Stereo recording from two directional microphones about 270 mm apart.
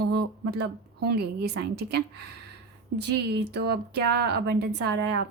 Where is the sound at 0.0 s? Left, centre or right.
Right.